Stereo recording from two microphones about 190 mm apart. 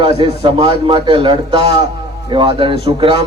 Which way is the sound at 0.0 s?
25° right (ahead or behind).